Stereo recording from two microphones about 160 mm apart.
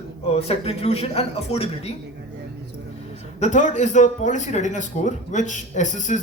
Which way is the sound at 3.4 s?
50° left (ahead or behind).